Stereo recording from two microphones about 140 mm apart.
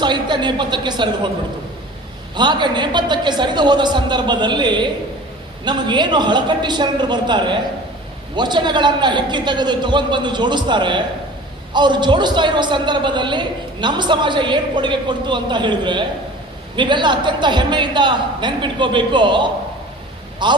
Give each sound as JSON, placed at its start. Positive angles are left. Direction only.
{"t": 0.0, "sound": "a man's voice", "side_deg": -35}
{"t": 2.3, "sound": "a man's voice", "side_deg": -30}